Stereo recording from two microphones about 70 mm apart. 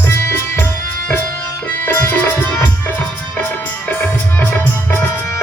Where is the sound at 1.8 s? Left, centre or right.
Left.